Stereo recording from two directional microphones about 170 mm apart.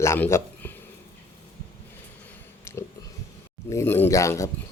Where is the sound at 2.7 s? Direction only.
15° left (ahead or behind).